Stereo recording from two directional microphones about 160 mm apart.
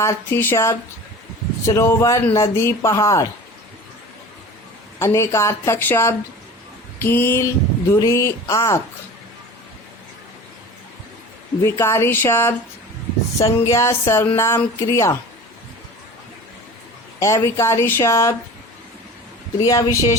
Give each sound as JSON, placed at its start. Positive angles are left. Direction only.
{"t": 0.0, "sound": "speech", "side_deg": 15}
{"t": 4.9, "sound": "speech", "side_deg": 15}
{"t": 11.6, "sound": "speech", "side_deg": 15}
{"t": 13.7, "sound": "speech", "side_deg": 20}
{"t": 17.2, "sound": "speech", "side_deg": 20}
{"t": 19.5, "sound": "speech", "side_deg": 25}